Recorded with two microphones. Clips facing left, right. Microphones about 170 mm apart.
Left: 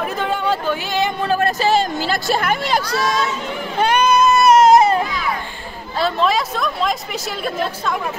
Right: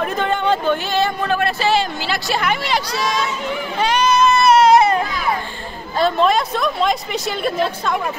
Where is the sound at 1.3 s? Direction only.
40° left (ahead or behind).